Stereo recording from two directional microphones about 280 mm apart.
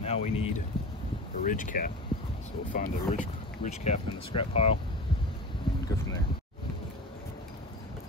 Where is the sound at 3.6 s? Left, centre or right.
Left.